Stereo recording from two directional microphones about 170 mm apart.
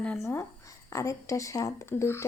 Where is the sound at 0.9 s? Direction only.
15° left (ahead or behind).